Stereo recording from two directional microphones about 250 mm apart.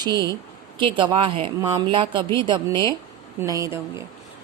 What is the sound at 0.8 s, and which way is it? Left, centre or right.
A woman's voice, centre.